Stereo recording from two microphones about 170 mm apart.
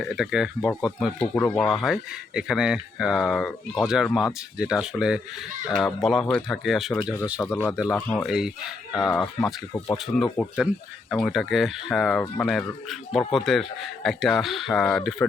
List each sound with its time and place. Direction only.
0.0 s speech: centre (ahead or behind)
7.5 s speech: 10° left (ahead or behind)
8.3 s speech: 5° right (ahead or behind); by 10.0 s 15° left (ahead or behind)
10.4 s speech: centre (ahead or behind)